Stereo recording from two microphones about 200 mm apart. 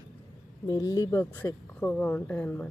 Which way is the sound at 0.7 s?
15° left (ahead or behind).